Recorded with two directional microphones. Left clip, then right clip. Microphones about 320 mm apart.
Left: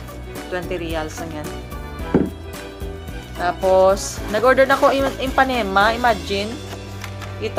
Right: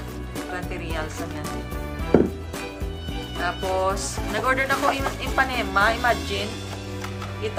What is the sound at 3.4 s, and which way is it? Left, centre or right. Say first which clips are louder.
Speech: left 9 dB; left.